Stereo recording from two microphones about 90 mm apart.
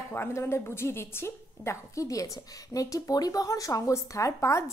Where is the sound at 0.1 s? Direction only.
25° left (ahead or behind).